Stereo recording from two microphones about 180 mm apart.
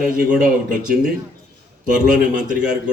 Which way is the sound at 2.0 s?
45° right (ahead or behind).